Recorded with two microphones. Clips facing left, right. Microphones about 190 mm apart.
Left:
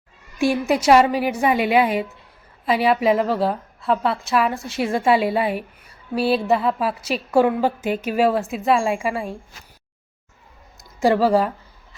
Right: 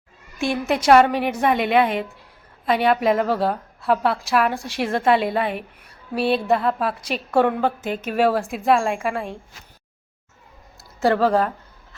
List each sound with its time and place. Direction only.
0.5 s a woman's voice: 5° left (ahead or behind)
6.1 s a sound: 35° left (ahead or behind)
6.5 s a woman's voice: centre (ahead or behind)
11.0 s speech: 10° left (ahead or behind)